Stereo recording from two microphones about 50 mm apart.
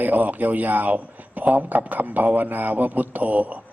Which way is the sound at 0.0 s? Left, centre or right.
Right.